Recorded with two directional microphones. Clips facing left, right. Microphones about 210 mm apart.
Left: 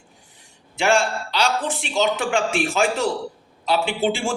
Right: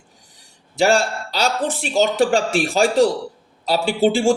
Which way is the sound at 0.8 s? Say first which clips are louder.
Right 3 dB; 35° right (ahead or behind).